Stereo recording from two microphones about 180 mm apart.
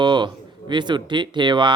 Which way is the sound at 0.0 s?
25° right (ahead or behind).